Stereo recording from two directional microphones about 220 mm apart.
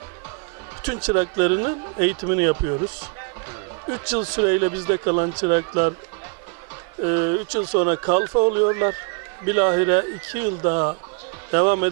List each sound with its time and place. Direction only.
0.9 s speech: 15° right (ahead or behind)
4.2 s a man's voice: 20° right (ahead or behind)
7.0 s a man's voice: 20° right (ahead or behind)